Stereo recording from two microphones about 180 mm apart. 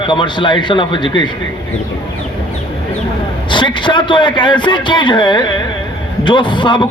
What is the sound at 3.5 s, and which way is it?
Speech, 25° left (ahead or behind).